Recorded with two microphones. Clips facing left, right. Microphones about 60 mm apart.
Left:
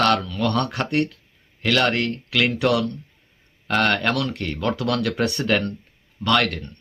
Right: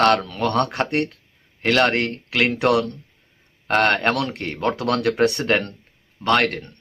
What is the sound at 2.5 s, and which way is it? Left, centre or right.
Speech, right.